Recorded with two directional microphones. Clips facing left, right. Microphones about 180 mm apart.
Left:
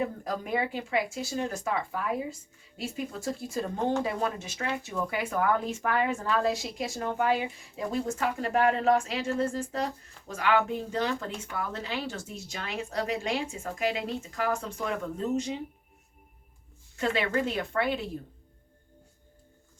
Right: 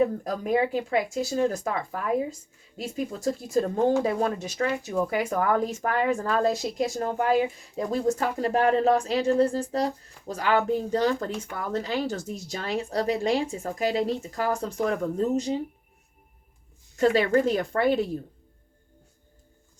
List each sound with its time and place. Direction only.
0.4 s speech: 40° right (ahead or behind)
17.0 s speech: 40° right (ahead or behind)